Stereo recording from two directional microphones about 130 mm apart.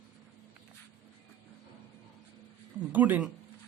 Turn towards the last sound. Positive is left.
turn(degrees=-15)  # may be behind; listen again after turning